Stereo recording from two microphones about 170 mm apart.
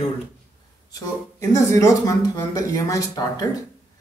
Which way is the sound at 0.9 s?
20° left (ahead or behind).